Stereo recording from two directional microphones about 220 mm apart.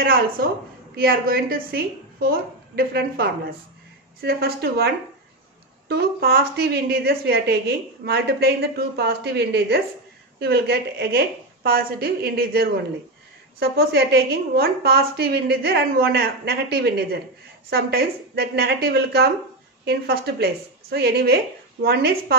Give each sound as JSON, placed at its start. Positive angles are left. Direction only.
{"t": 0.0, "sound": "a woman's voice", "side_deg": -40}